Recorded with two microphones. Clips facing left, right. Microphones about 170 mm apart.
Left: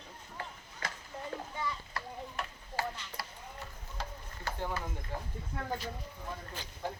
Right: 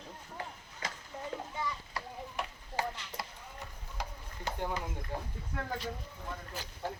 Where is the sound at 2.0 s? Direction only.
15° right (ahead or behind).